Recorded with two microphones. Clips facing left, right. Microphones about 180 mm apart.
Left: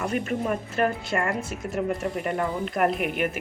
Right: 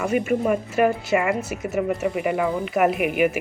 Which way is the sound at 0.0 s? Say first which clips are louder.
Right 5 dB; 10° right (ahead or behind).